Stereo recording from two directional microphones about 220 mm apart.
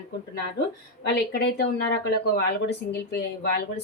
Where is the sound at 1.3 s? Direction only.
50° left (ahead or behind).